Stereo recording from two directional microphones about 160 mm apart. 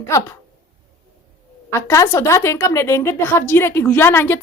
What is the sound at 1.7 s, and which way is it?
A woman's voice, 15° left (ahead or behind).